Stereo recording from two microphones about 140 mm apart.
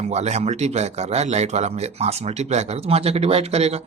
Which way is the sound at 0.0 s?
50° right (ahead or behind).